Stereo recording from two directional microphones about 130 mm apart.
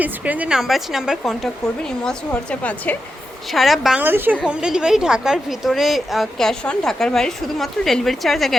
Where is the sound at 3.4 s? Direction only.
Centre (ahead or behind).